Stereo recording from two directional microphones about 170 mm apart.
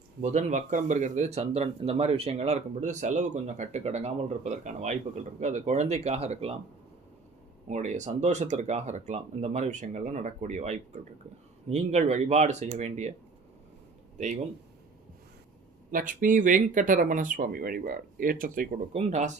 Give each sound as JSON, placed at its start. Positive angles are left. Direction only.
{"t": 0.2, "sound": "speech", "side_deg": -45}
{"t": 7.7, "sound": "speech", "side_deg": -45}
{"t": 15.9, "sound": "speech", "side_deg": -50}